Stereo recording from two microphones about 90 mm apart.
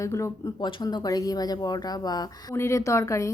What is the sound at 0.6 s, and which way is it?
Speech, 55° left (ahead or behind).